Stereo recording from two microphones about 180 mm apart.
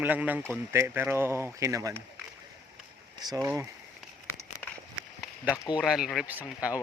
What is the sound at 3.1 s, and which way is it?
Speech, 20° right (ahead or behind).